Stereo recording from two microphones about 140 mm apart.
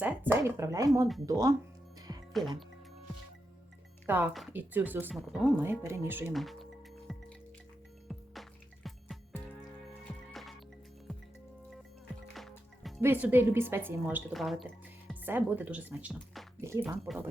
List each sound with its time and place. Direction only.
0.0 s speech: 15° right (ahead or behind)
2.0 s music: 25° right (ahead or behind)
4.0 s a woman's voice: 15° right (ahead or behind)
5.1 s speech: centre (ahead or behind)
5.5 s a woman's voice: 15° right (ahead or behind)
6.3 s speech: centre (ahead or behind)
7.1 s music: centre (ahead or behind)
12.3 s music: centre (ahead or behind)
13.0 s a woman's voice: 15° right (ahead or behind)
14.3 s music: centre (ahead or behind)
15.1 s a woman's voice: 15° right (ahead or behind)
16.1 s music: centre (ahead or behind)
16.6 s speech: 20° right (ahead or behind)
17.1 s speech: centre (ahead or behind)